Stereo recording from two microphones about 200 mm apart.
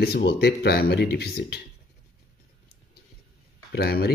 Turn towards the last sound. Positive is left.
turn(degrees=50)  # may be behind; listen again after turning